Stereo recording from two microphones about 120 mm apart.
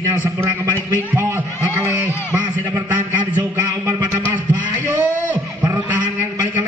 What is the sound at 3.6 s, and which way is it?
Music, 20° right (ahead or behind).